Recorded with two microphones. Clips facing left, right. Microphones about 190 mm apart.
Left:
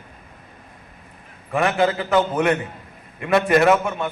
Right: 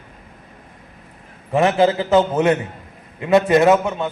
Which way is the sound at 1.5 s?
25° right (ahead or behind).